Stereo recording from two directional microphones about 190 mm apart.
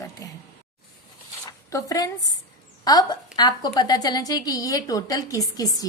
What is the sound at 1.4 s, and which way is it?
A woman's voice, 20° left (ahead or behind).